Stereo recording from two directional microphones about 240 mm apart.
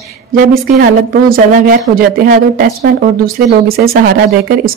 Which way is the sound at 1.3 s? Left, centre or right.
Right.